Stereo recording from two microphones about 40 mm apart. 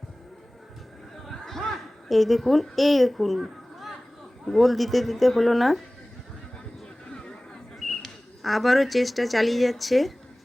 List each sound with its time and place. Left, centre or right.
1.3 s a sound: centre
4.4 s speech: centre
7.1 s chatter: centre
7.9 s speech: centre